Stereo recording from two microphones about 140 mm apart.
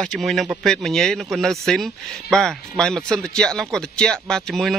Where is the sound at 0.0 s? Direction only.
5° left (ahead or behind).